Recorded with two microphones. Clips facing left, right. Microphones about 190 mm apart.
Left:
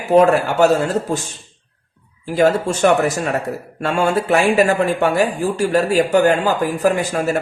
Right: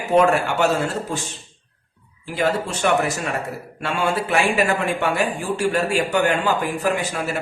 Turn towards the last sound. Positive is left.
turn(degrees=40)  # may be behind; listen again after turning